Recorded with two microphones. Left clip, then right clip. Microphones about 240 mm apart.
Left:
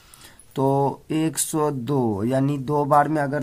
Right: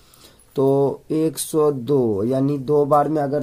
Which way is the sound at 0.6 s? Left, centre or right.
Left.